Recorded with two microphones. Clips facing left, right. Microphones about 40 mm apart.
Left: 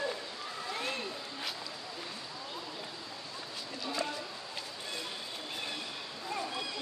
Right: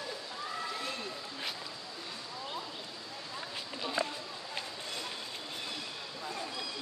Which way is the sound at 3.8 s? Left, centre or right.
Right.